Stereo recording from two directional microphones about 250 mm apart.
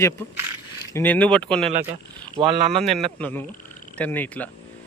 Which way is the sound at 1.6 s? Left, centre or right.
Right.